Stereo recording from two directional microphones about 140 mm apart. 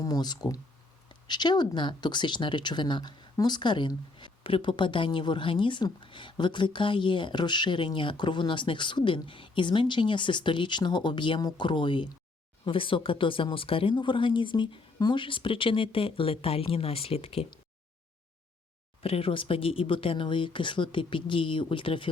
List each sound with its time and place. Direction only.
0.0 s speech: 30° left (ahead or behind); by 17.4 s 45° left (ahead or behind)
19.0 s speech: 40° left (ahead or behind)